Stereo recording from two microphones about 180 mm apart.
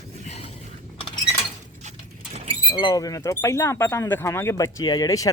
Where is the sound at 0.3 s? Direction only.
35° left (ahead or behind).